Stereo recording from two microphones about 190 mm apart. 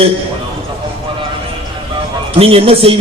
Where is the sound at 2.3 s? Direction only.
30° right (ahead or behind).